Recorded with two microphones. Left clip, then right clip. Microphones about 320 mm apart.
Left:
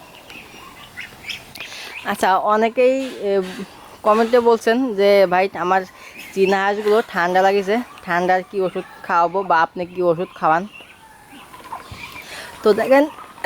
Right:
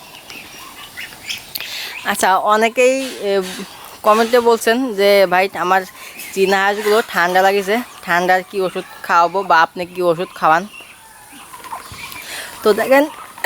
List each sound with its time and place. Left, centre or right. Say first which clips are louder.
0.9 s duck: right 3 dB; centre
2.4 s speech: right 3 dB; centre
6.7 s speech: right 2 dB; centre
7.1 s speech: right 3 dB; centre
11.9 s a sound: right 4 dB; centre